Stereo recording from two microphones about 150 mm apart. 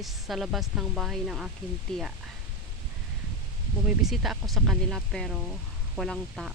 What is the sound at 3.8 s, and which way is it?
Speech, 5° right (ahead or behind).